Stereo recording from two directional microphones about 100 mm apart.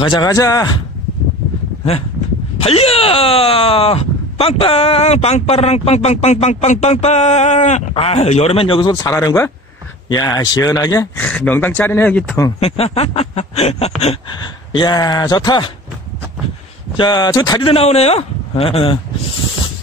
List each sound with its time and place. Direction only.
0.0 s speech: 55° left (ahead or behind)
0.3 s a man's voice: 35° left (ahead or behind)
2.6 s a man's voice: 85° left; by 8.9 s 65° left (ahead or behind)
8.9 s a man's voice: 35° left (ahead or behind)
10.0 s a man's voice: 45° left (ahead or behind)
11.1 s speech: 10° left (ahead or behind)
12.5 s speech: 85° left
14.7 s speech: 45° left (ahead or behind)
16.9 s speech: 50° left (ahead or behind)
17.6 s a man's voice: 85° left